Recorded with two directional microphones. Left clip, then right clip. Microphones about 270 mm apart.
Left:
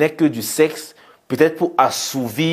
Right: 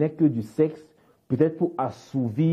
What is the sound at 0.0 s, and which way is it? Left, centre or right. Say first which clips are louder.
Speech: left 6 dB; centre.